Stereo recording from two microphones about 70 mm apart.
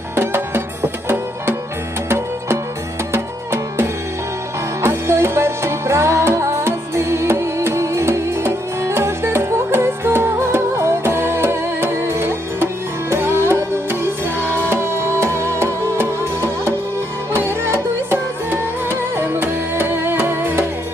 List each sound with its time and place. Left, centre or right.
0.1 s music: right